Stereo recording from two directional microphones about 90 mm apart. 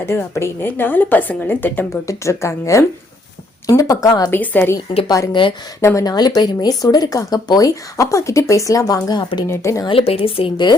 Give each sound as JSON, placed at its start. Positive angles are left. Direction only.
{"t": 0.0, "sound": "a woman's voice", "side_deg": 30}
{"t": 1.9, "sound": "speech", "side_deg": 35}
{"t": 4.3, "sound": "a woman's voice", "side_deg": 20}
{"t": 5.0, "sound": "speech", "side_deg": 40}
{"t": 5.3, "sound": "speech", "side_deg": 60}
{"t": 5.8, "sound": "speech", "side_deg": 30}
{"t": 6.1, "sound": "speech", "side_deg": 50}
{"t": 9.0, "sound": "speech", "side_deg": 55}
{"t": 9.5, "sound": "speech", "side_deg": 35}
{"t": 9.9, "sound": "a woman's voice", "side_deg": 90}